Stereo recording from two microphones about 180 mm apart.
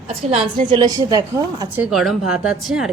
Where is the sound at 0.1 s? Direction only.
35° right (ahead or behind).